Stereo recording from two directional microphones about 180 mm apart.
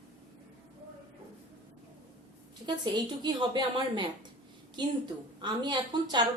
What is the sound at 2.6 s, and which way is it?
A woman's voice, 25° right (ahead or behind).